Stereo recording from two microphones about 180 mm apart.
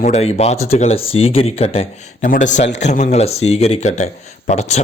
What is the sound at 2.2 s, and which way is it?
A man's voice, 45° left (ahead or behind).